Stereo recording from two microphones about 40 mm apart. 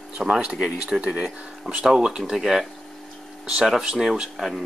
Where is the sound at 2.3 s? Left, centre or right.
Centre.